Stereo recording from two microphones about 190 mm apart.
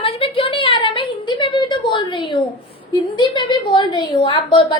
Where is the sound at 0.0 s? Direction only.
30° left (ahead or behind).